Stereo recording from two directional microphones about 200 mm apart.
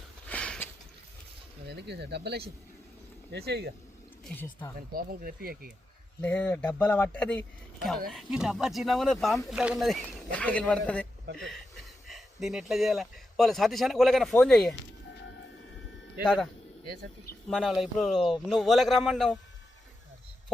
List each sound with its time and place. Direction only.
0.3 s a sound: 5° left (ahead or behind)
1.6 s speech: 55° right (ahead or behind)
4.9 s speech: 45° right (ahead or behind)
6.2 s speech: 5° left (ahead or behind)
17.5 s speech: centre (ahead or behind)